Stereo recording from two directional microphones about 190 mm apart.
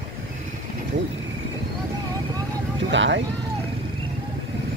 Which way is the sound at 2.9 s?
70° right (ahead or behind).